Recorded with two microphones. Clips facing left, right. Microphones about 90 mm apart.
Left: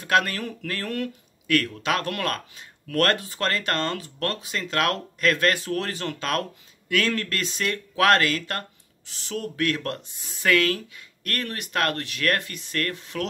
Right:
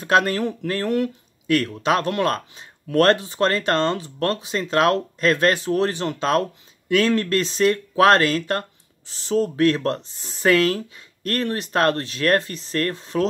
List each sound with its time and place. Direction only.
0.0 s speech: 25° right (ahead or behind)